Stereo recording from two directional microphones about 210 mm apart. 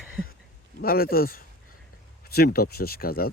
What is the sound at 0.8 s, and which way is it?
Speech, 45° left (ahead or behind).